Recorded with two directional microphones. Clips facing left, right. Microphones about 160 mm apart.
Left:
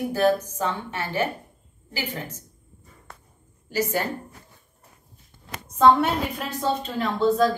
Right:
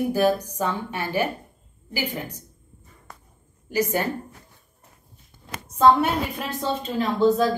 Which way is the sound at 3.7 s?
20° right (ahead or behind).